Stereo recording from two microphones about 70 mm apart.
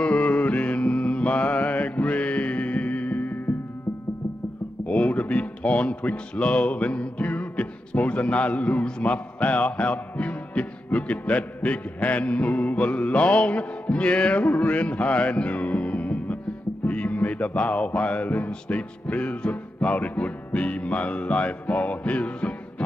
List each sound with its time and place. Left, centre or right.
0.0 s mantra: centre
4.8 s speech: centre
14.6 s music: centre